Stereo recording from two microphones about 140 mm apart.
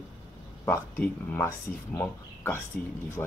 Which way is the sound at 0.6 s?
15° left (ahead or behind).